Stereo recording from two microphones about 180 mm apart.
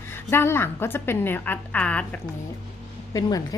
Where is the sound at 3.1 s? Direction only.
20° left (ahead or behind).